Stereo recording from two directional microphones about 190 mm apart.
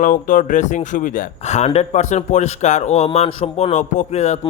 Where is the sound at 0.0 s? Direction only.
45° left (ahead or behind).